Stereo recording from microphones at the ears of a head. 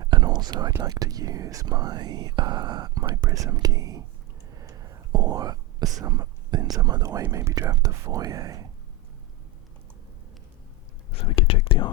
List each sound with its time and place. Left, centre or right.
0.0 s speech: right
11.1 s speech: left